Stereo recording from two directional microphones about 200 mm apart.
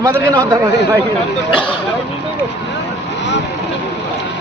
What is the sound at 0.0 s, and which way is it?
Speech, 15° right (ahead or behind).